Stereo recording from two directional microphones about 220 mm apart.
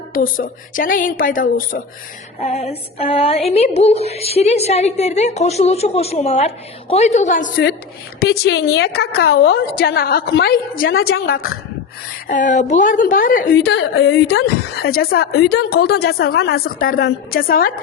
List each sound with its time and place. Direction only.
0.1 s a woman's voice: 40° left (ahead or behind)
13.9 s a woman's voice: 70° left (ahead or behind)
14.2 s a woman's voice: 45° left (ahead or behind)